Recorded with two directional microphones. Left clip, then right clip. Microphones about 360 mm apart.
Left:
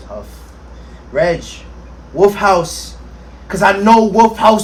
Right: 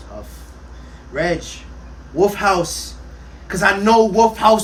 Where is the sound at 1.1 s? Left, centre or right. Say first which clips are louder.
Left 6 dB; centre.